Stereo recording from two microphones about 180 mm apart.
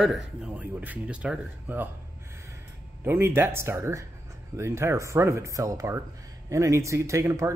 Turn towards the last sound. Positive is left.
turn(degrees=-15)  # may be behind; listen again after turning